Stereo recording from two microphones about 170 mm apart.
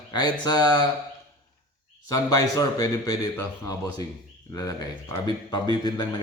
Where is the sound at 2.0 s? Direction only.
20° left (ahead or behind).